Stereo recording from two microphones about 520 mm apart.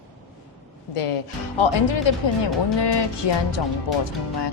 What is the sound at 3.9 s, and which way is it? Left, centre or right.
Speech, left.